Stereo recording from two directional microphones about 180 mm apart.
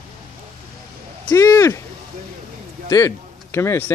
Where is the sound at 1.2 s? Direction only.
15° left (ahead or behind).